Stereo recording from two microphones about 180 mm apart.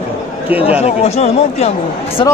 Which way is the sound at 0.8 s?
35° left (ahead or behind).